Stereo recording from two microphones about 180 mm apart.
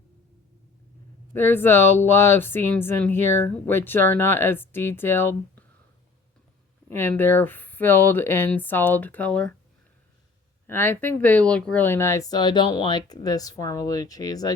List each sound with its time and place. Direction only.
1.3 s speech: 10° left (ahead or behind)
6.9 s speech: 10° left (ahead or behind)
10.7 s speech: 10° left (ahead or behind)